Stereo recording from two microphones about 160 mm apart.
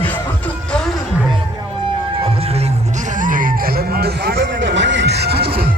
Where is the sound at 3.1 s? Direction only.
55° right (ahead or behind); by 5.7 s 75° right (ahead or behind).